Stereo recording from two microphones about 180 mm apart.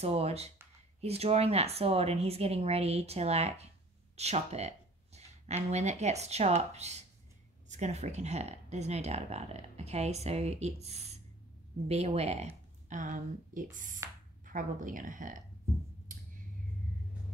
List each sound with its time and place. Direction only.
0.0 s speech: 35° right (ahead or behind)